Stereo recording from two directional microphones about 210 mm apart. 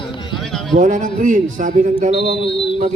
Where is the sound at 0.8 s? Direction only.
40° right (ahead or behind).